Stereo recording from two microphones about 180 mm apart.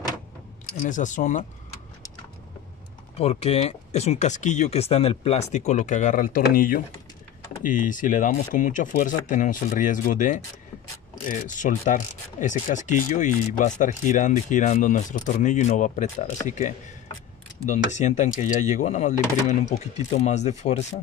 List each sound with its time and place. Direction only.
0.8 s mechanisms: 45° left (ahead or behind)
3.2 s speech: 35° left (ahead or behind); by 6.8 s 50° left (ahead or behind)
7.5 s mechanisms: 45° left (ahead or behind)
17.6 s speech: 40° left (ahead or behind)